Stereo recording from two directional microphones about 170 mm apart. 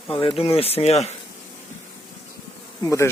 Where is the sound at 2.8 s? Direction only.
20° left (ahead or behind).